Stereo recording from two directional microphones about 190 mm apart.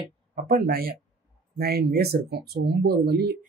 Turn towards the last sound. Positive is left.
turn(degrees=-55)  # may be behind; listen again after turning